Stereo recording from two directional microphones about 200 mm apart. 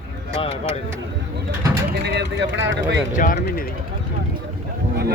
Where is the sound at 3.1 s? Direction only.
40° left (ahead or behind).